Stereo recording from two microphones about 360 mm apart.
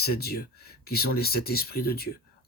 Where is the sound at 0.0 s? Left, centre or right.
Left.